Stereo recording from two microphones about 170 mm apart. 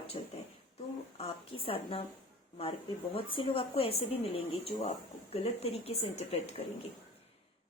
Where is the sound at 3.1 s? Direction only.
30° left (ahead or behind).